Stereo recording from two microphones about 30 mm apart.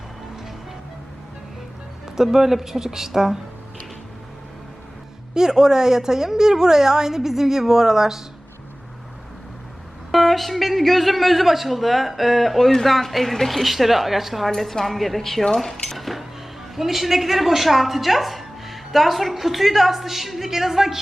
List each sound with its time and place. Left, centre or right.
2.0 s a woman's voice: centre
5.3 s a woman's voice: centre
10.1 s a woman's voice: centre
14.5 s a woman's voice: centre
15.9 s a sound: centre
16.7 s a woman's voice: centre